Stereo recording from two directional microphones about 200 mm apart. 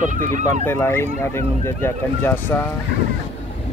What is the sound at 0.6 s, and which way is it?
Speech, 10° left (ahead or behind).